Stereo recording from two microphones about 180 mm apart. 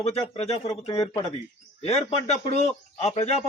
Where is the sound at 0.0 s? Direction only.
35° left (ahead or behind).